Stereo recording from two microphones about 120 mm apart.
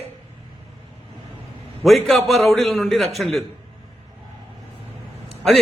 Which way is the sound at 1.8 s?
Centre (ahead or behind).